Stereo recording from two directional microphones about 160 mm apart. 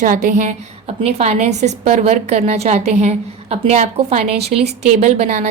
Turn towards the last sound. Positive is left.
turn(degrees=-45)  # may be behind; listen again after turning